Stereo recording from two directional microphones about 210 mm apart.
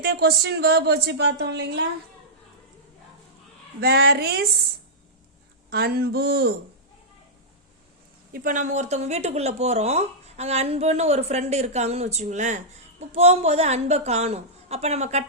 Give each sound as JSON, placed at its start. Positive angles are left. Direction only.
{"t": 0.0, "sound": "a woman's voice", "side_deg": -50}
{"t": 3.8, "sound": "a woman's voice", "side_deg": -50}
{"t": 5.7, "sound": "a woman's voice", "side_deg": -50}
{"t": 8.3, "sound": "speech", "side_deg": -35}